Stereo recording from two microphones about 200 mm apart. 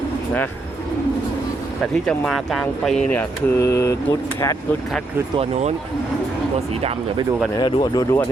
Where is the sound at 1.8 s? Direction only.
5° left (ahead or behind).